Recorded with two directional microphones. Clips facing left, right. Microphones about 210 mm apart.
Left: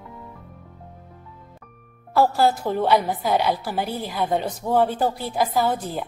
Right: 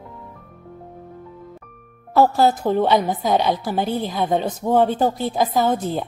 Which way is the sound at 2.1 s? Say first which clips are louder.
Right 3 dB; 20° right (ahead or behind).